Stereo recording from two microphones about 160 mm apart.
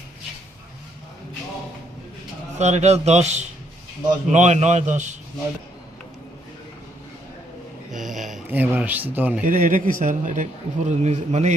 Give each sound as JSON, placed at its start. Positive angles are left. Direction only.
{"t": 2.6, "sound": "speech", "side_deg": -45}
{"t": 8.0, "sound": "a sound", "side_deg": 0}
{"t": 8.4, "sound": "speech", "side_deg": -10}
{"t": 9.4, "sound": "speech", "side_deg": -60}